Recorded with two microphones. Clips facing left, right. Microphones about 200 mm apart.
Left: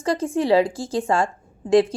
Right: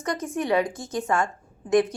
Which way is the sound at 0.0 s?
30° left (ahead or behind).